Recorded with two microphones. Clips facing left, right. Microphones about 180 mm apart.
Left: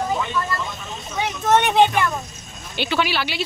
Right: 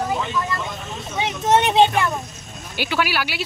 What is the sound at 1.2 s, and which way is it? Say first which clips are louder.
Speech: even; 25° right (ahead or behind).